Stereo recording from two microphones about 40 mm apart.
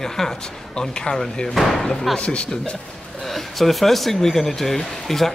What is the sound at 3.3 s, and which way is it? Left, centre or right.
Speech, centre.